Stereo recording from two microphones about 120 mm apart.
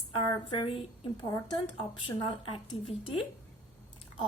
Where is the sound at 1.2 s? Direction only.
35° left (ahead or behind).